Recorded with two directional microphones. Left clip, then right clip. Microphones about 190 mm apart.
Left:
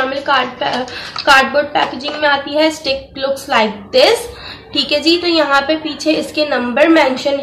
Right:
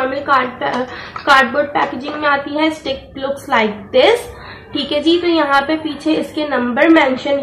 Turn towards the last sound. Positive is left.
turn(degrees=5)  # may be behind; listen again after turning